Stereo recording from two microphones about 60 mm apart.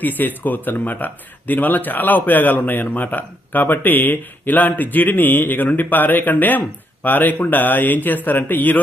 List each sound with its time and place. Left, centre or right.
0.0 s speech: left